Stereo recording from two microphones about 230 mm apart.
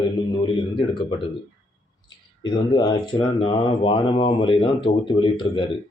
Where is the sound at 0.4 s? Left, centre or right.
Left.